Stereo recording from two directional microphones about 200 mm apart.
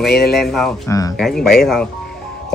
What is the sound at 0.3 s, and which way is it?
A man's voice, centre (ahead or behind).